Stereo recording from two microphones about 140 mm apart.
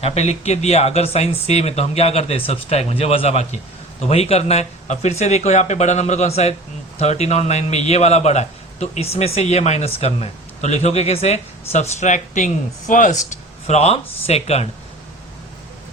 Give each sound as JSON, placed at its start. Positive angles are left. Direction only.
{"t": 0.0, "sound": "a man's voice", "side_deg": 50}
{"t": 13.7, "sound": "a man's voice", "side_deg": 50}